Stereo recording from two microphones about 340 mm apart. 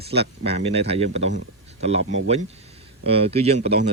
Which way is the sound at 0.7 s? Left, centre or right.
Centre.